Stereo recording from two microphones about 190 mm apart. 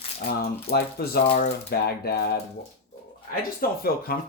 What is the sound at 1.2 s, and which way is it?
Speech, 35° left (ahead or behind).